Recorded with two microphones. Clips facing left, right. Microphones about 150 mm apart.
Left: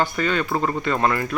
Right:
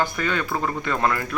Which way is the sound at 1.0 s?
10° left (ahead or behind).